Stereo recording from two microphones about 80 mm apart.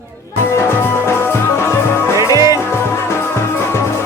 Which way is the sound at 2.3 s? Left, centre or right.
Right.